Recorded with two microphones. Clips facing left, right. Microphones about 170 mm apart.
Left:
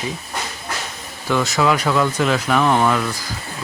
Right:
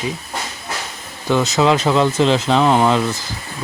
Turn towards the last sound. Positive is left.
turn(degrees=-20)  # may be behind; listen again after turning